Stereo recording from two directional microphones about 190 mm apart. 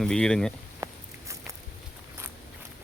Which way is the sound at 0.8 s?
15° right (ahead or behind).